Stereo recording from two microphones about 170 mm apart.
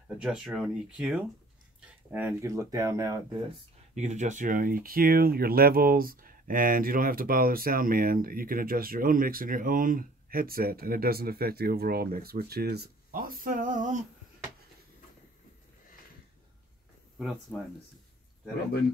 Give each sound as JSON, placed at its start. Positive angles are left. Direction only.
{"t": 0.2, "sound": "speech", "side_deg": -5}
{"t": 3.9, "sound": "speech", "side_deg": -45}